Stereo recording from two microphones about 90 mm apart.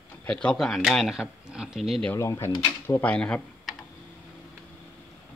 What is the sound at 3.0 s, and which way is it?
Speech, 15° left (ahead or behind).